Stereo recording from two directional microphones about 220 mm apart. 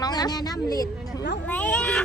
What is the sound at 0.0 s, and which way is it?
A woman's voice, 20° left (ahead or behind).